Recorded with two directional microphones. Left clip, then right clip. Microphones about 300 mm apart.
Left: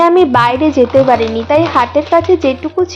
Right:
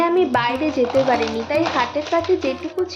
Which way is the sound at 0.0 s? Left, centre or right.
Left.